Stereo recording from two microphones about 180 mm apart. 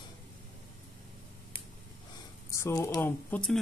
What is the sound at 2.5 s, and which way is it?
Speech, 15° left (ahead or behind).